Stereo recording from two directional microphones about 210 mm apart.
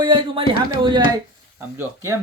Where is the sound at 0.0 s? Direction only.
25° right (ahead or behind).